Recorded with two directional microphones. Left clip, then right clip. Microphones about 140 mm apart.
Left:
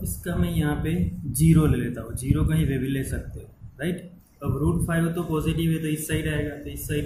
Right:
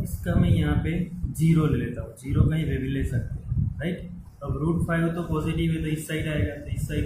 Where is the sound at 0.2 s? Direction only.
45° left (ahead or behind).